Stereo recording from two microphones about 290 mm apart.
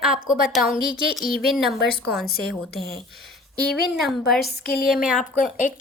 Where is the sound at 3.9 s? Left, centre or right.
Centre.